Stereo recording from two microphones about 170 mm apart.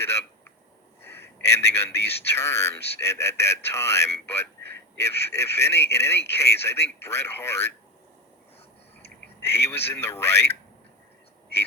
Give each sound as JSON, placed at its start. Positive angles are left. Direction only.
{"t": 1.0, "sound": "a sound", "side_deg": 15}
{"t": 2.0, "sound": "speech", "side_deg": 15}
{"t": 9.4, "sound": "speech", "side_deg": 15}